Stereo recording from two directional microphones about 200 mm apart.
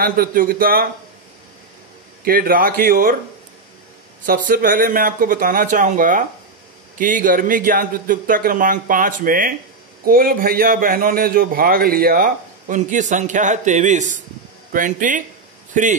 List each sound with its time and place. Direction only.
0.0 s a man's voice: 45° right (ahead or behind)
2.2 s a man's voice: 45° right (ahead or behind)
4.3 s a man's voice: 45° right (ahead or behind)